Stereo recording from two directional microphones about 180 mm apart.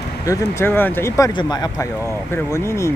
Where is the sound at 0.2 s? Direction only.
15° left (ahead or behind).